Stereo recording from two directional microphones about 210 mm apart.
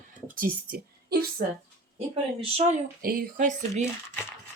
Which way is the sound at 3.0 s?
45° right (ahead or behind).